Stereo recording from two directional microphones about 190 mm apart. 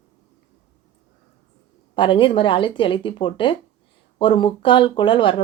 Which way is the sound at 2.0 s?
25° left (ahead or behind).